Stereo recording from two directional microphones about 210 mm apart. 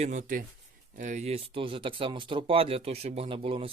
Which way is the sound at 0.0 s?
35° right (ahead or behind).